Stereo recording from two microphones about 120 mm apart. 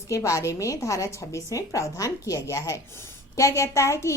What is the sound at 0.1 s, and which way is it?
A woman's voice, 25° left (ahead or behind).